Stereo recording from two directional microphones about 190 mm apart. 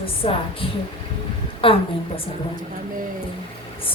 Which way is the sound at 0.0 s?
30° left (ahead or behind).